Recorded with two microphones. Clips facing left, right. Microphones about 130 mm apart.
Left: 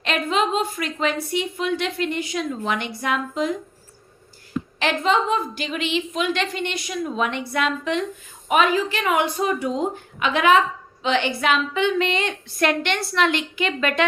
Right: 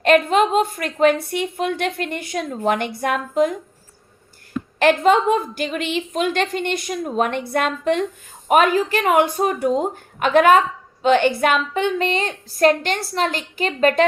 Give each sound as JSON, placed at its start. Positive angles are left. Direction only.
{"t": 0.0, "sound": "a woman's voice", "side_deg": -50}
{"t": 4.8, "sound": "a woman's voice", "side_deg": -50}